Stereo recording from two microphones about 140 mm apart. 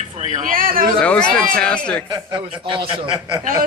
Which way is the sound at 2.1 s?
35° right (ahead or behind).